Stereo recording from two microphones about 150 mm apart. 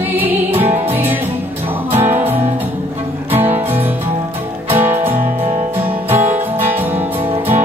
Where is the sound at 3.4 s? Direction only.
15° right (ahead or behind).